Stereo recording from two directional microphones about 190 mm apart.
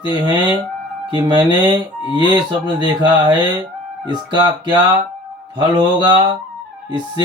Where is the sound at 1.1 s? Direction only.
25° right (ahead or behind).